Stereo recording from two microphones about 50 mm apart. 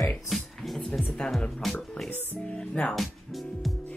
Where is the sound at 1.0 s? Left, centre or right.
Left.